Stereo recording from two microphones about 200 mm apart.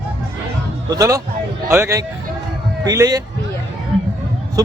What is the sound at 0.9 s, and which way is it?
Speech, 15° right (ahead or behind).